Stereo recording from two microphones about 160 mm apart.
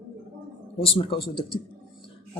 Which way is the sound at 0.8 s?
35° left (ahead or behind).